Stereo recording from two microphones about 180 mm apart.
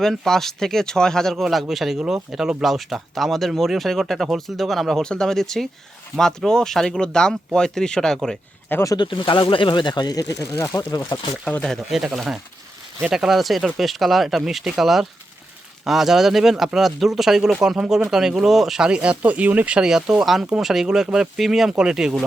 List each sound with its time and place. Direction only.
0.0 s speech: centre (ahead or behind)
8.8 s speech: 20° left (ahead or behind)
11.4 s speech: 5° left (ahead or behind)